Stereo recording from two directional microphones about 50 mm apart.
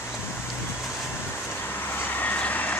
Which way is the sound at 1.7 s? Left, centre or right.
Left.